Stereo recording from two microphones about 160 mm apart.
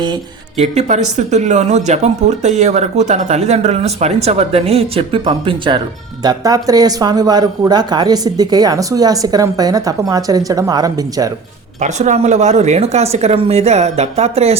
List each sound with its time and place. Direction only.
0.5 s speech: 45° right (ahead or behind); by 11.3 s 25° right (ahead or behind)
11.8 s speech: 45° right (ahead or behind)